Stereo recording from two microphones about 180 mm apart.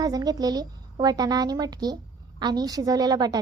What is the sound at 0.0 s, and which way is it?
A woman's voice, 20° right (ahead or behind).